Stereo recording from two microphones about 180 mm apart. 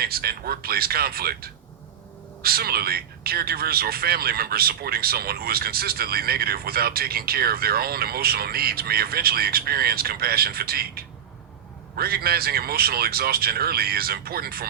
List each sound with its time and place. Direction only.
0.0 s a man's voice: 55° right (ahead or behind)